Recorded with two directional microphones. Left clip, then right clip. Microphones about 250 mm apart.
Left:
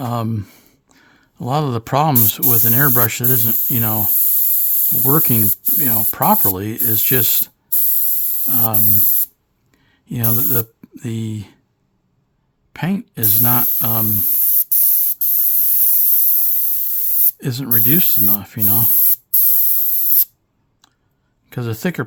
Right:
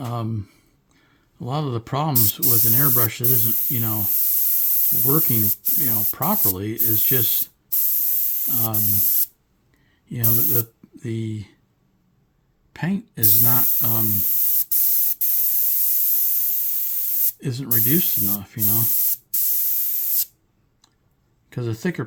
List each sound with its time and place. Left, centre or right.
0.0 s speech: left
5.0 s speech: left
10.1 s speech: left
12.7 s speech: left
17.4 s speech: left
21.5 s speech: left